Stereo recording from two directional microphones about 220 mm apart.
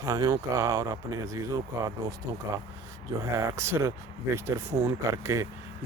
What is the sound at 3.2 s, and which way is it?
Speech, 10° right (ahead or behind).